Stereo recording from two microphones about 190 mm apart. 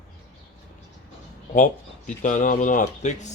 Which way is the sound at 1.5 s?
40° left (ahead or behind).